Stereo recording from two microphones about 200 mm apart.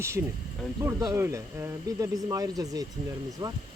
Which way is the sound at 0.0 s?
15° right (ahead or behind).